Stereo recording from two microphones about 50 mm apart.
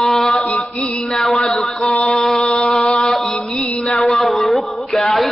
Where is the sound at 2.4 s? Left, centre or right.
Centre.